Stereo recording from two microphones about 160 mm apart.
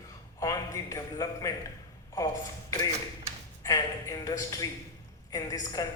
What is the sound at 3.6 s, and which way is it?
A woman's voice, 20° left (ahead or behind).